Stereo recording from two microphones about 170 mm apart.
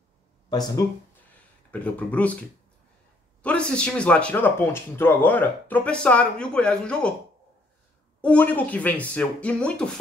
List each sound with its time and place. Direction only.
0.5 s speech: 25° left (ahead or behind)
1.7 s speech: 10° left (ahead or behind)
3.4 s speech: 5° left (ahead or behind)
8.2 s speech: 5° left (ahead or behind)